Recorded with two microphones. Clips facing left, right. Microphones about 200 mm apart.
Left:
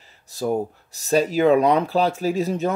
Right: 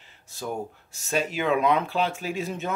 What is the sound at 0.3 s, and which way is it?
Speech, 35° left (ahead or behind).